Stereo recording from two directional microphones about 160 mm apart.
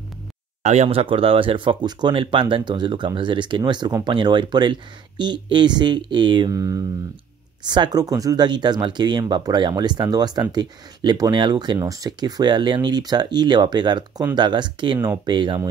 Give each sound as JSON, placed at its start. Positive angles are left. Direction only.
{"t": 0.7, "sound": "speech", "side_deg": -40}